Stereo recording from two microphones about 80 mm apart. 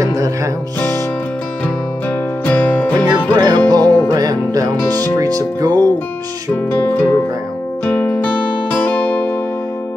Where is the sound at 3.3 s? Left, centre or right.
Right.